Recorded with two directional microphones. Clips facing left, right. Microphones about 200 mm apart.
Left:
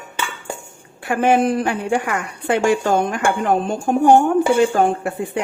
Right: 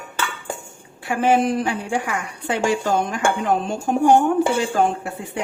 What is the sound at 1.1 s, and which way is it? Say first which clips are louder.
A woman's voice: left 2 dB; 55° left (ahead or behind).